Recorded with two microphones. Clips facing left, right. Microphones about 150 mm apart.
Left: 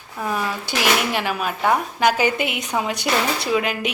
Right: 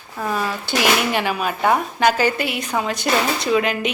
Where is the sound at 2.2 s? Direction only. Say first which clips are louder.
Right 1 dB; 20° left (ahead or behind).